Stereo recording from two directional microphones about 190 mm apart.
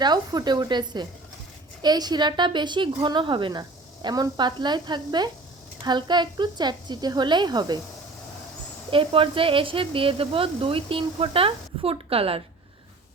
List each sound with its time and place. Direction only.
0.0 s a woman's voice: 20° right (ahead or behind)
8.9 s a woman's voice: 25° right (ahead or behind)